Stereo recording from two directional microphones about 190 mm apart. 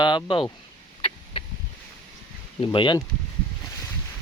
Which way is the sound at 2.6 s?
25° left (ahead or behind).